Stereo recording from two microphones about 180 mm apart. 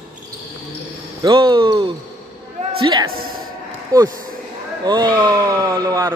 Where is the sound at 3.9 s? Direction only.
20° right (ahead or behind).